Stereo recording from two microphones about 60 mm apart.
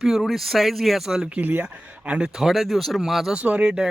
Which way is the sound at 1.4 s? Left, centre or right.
Right.